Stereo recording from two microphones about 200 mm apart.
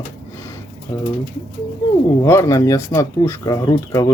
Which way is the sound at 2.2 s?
15° left (ahead or behind).